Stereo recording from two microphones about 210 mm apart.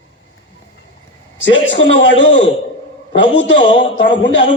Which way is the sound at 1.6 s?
60° left (ahead or behind).